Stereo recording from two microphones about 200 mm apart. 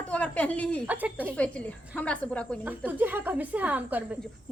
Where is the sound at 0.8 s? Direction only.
10° right (ahead or behind).